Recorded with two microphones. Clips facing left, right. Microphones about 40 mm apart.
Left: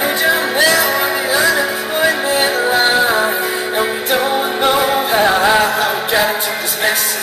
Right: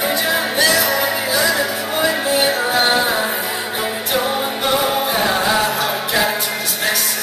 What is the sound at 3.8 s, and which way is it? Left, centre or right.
Music, left.